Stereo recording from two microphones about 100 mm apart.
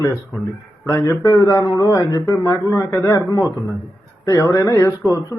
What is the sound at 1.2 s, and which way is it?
A man's voice, 35° left (ahead or behind).